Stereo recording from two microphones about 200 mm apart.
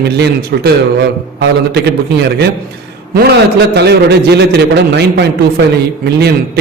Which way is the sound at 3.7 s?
55° right (ahead or behind).